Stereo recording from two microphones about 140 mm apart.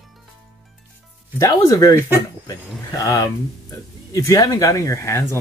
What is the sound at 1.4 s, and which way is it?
Speech, 25° left (ahead or behind).